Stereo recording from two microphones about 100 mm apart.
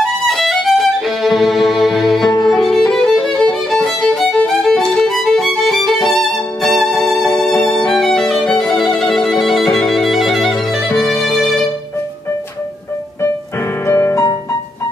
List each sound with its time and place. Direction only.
0.0 s violin: 5° left (ahead or behind)
2.4 s music: 5° left (ahead or behind)
7.4 s violin: 10° left (ahead or behind)
10.9 s music: 5° left (ahead or behind)
13.8 s music: 25° left (ahead or behind)